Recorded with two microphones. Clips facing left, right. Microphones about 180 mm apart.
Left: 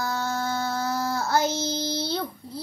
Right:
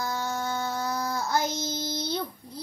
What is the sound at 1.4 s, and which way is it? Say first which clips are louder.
Child singing: left 4 dB; 30° left (ahead or behind).